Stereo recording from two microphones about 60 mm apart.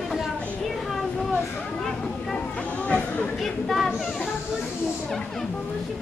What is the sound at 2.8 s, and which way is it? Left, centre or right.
Chatter, left.